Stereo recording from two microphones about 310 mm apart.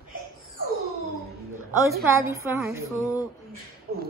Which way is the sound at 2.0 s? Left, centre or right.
Centre.